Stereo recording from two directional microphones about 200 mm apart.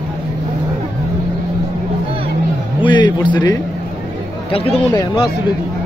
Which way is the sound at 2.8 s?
20° left (ahead or behind).